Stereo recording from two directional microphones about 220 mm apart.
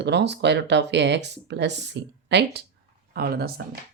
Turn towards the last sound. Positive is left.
turn(degrees=-45)  # may be behind; listen again after turning